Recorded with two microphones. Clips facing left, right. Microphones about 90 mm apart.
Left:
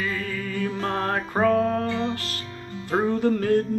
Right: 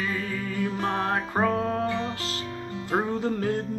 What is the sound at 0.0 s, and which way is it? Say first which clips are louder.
Music: left 1 dB; 10° right (ahead or behind).